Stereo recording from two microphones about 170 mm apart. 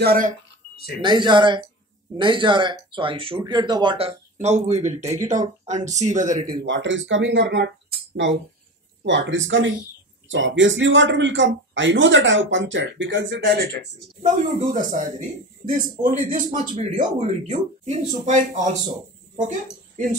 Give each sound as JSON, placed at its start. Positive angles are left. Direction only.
{"t": 0.0, "sound": "speech", "side_deg": -60}
{"t": 1.0, "sound": "speech", "side_deg": -25}
{"t": 6.6, "sound": "speech", "side_deg": -90}
{"t": 9.0, "sound": "speech", "side_deg": -90}
{"t": 14.2, "sound": "a man's voice", "side_deg": -45}